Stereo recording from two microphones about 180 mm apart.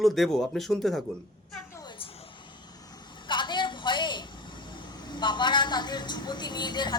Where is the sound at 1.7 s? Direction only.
25° left (ahead or behind).